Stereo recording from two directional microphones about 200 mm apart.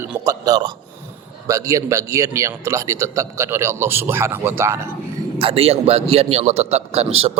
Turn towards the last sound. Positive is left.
turn(degrees=-30)  # may be behind; listen again after turning